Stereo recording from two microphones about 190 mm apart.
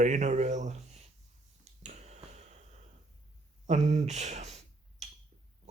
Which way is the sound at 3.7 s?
35° right (ahead or behind).